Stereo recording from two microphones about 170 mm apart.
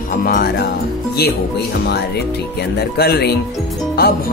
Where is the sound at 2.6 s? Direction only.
70° left (ahead or behind).